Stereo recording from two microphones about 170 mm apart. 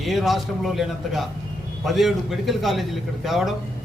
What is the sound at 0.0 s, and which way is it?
A man's voice, centre (ahead or behind).